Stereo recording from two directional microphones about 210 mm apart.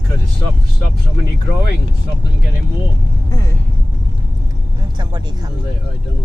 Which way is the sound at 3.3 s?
15° left (ahead or behind).